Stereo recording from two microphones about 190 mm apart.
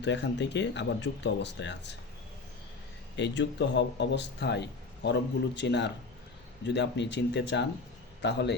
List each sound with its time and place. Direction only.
0.0 s speech: 70° left (ahead or behind)
3.2 s speech: 65° left (ahead or behind)